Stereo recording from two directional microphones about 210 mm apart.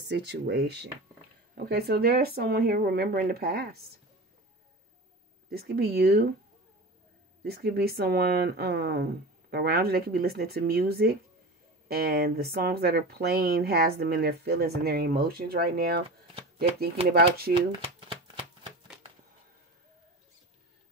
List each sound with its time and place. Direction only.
0.0 s speech: 55° right (ahead or behind)
5.5 s speech: 50° right (ahead or behind)
7.4 s speech: 50° right (ahead or behind)
16.9 s speech: 30° right (ahead or behind)
17.6 s shuffling cards: 25° right (ahead or behind)